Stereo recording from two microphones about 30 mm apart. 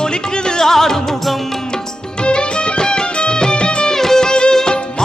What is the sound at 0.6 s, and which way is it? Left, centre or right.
Music, centre.